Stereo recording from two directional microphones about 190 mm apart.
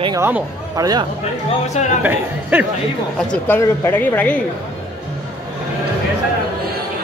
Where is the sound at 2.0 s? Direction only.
10° right (ahead or behind).